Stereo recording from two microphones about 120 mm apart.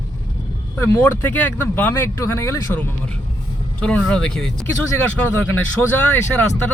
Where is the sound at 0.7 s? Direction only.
20° left (ahead or behind).